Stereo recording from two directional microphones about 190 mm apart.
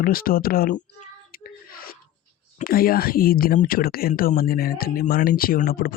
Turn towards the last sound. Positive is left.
turn(degrees=50)  # may be behind; listen again after turning